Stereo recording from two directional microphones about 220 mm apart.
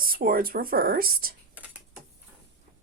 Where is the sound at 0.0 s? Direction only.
40° right (ahead or behind).